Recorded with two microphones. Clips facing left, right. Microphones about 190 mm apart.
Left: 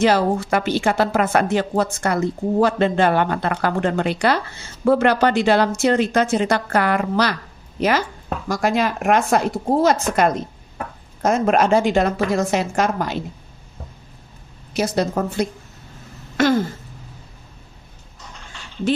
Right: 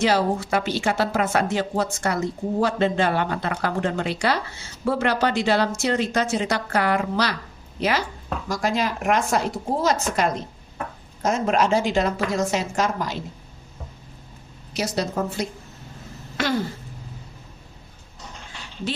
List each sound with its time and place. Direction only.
0.0 s a woman's voice: 55° left (ahead or behind)
14.7 s a woman's voice: 55° left (ahead or behind)